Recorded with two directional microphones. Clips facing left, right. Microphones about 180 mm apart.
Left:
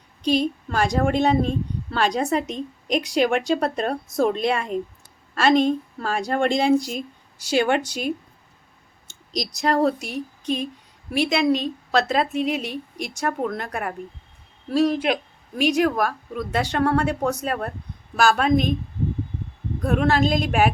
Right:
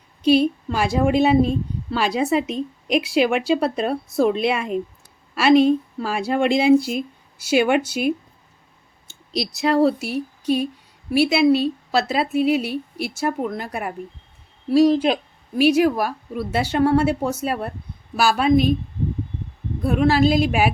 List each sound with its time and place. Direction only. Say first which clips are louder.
0.2 s a woman's voice: right 5 dB; 10° right (ahead or behind)
9.3 s speech: right 3 dB; 5° right (ahead or behind)
14.8 s speech: right 4 dB; 30° right (ahead or behind)
15.5 s a woman's voice: right 4 dB; 5° right (ahead or behind)
19.8 s speech: right 3 dB; 5° right (ahead or behind)